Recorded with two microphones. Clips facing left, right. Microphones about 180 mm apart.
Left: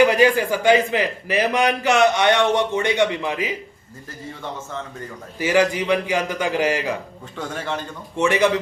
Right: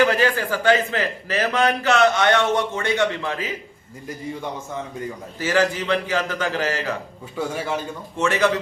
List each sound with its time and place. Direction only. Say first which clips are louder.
0.0 s a man's voice: left 3 dB; 15° left (ahead or behind)
5.4 s a man's voice: left 2 dB; 15° left (ahead or behind)
7.3 s a man's voice: right 2 dB; 10° right (ahead or behind)
8.2 s a man's voice: left 2 dB; 15° left (ahead or behind)